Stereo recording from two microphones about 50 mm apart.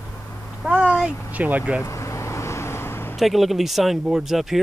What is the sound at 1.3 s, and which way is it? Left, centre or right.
Speech, right.